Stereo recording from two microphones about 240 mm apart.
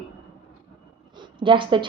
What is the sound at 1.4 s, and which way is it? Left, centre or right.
Speech, right.